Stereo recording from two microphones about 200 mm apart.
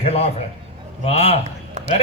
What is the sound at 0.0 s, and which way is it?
A man's voice, 30° left (ahead or behind).